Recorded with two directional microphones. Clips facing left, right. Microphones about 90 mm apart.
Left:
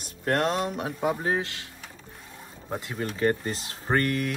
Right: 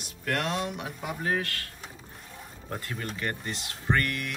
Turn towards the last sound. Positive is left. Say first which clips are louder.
# left 3 dB
turn(degrees=35)  # may be behind; listen again after turning